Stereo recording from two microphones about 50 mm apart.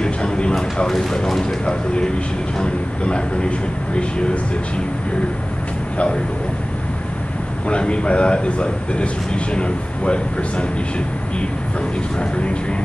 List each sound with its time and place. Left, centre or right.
0.0 s speech: centre
7.6 s speech: left